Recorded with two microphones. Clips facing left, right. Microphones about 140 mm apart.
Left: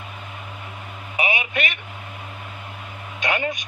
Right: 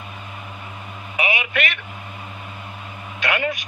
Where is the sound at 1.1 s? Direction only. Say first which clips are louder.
Right 1 dB; 25° left (ahead or behind).